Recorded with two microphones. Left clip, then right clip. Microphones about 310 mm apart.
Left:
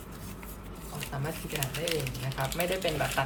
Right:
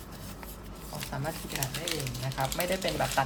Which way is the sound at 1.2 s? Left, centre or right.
Right.